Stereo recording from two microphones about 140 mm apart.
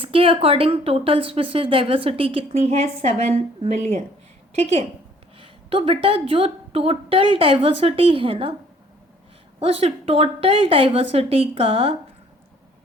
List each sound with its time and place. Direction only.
0.0 s a woman's voice: 40° right (ahead or behind)
5.4 s a woman's voice: 40° right (ahead or behind)
9.6 s a woman's voice: 45° right (ahead or behind)